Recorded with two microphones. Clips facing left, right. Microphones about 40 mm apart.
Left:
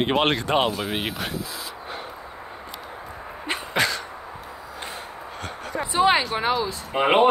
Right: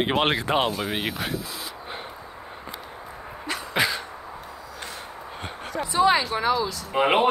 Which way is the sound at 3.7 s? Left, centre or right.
Centre.